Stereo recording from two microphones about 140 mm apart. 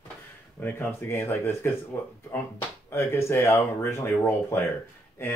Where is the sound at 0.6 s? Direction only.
15° left (ahead or behind).